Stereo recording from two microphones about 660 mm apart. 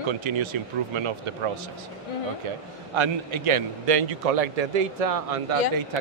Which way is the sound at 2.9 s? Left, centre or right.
Right.